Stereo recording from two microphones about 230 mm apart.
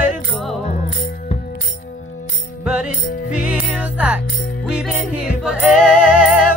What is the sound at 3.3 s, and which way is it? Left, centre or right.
Music, centre.